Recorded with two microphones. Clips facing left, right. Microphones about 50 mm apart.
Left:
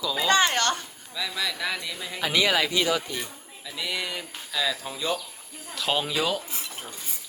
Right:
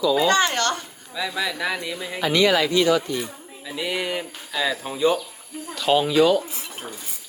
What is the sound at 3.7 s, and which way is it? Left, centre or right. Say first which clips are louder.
Speech: right 5 dB; right.